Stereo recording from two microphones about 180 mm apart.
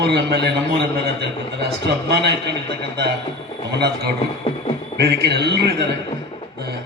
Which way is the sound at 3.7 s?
65° right (ahead or behind).